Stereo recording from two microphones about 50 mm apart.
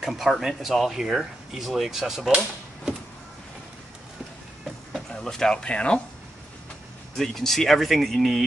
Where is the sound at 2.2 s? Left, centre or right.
Centre.